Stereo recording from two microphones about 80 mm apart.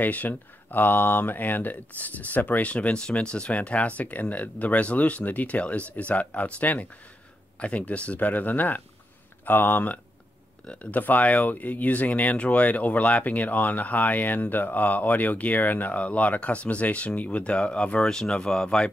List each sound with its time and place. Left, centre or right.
0.0 s speech: left